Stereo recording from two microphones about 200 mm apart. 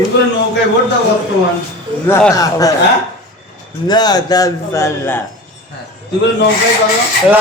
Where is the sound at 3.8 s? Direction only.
20° left (ahead or behind).